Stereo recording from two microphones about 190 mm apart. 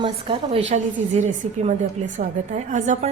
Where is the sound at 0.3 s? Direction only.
25° right (ahead or behind).